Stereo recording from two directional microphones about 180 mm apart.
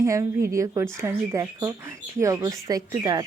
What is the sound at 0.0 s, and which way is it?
A woman's voice, 15° right (ahead or behind).